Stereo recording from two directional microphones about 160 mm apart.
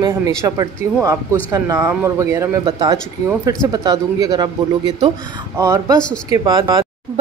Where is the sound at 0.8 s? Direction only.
50° left (ahead or behind).